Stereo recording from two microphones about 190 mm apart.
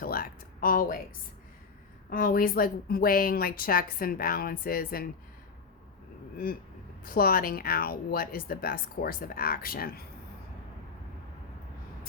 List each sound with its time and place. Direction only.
0.0 s a sound: 50° left (ahead or behind)
2.0 s speech: 50° left (ahead or behind)
6.3 s speech: 50° left (ahead or behind)